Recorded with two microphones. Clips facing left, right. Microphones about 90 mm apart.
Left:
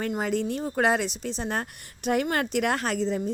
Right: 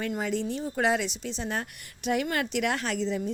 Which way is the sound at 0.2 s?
50° left (ahead or behind).